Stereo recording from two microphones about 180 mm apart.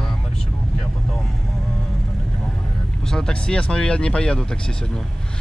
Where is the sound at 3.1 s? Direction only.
5° left (ahead or behind).